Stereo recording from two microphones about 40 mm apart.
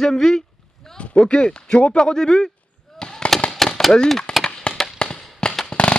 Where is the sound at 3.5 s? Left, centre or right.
Centre.